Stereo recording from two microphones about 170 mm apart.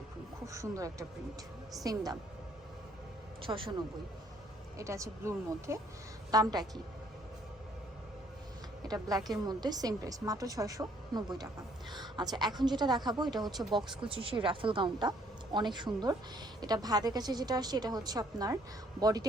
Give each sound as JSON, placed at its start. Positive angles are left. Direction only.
{"t": 0.4, "sound": "a woman's voice", "side_deg": -20}
{"t": 3.4, "sound": "speech", "side_deg": -30}
{"t": 4.8, "sound": "a woman's voice", "side_deg": -20}
{"t": 8.9, "sound": "a woman's voice", "side_deg": -20}